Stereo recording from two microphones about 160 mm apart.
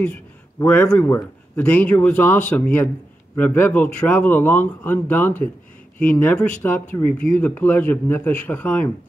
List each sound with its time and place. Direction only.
0.0 s a man's voice: 10° left (ahead or behind)